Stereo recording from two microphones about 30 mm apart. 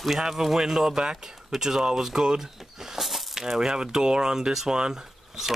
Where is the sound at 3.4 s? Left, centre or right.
Right.